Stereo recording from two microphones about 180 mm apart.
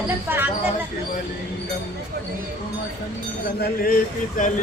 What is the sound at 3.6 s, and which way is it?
Speech, 55° left (ahead or behind).